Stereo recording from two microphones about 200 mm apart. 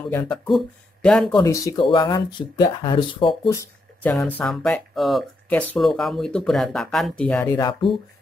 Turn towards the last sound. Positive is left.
turn(degrees=10)  # may be behind; listen again after turning